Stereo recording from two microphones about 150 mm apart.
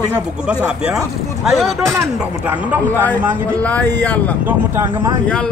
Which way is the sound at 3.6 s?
10° left (ahead or behind).